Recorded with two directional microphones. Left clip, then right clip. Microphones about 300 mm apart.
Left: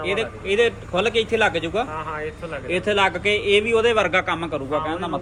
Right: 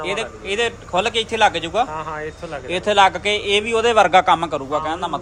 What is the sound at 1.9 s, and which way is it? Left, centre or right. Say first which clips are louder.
Speech: right 1 dB; right.